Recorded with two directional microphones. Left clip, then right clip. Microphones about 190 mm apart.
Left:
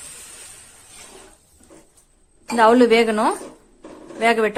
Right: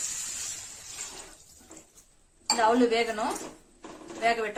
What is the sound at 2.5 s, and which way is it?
A woman's voice, 55° left (ahead or behind).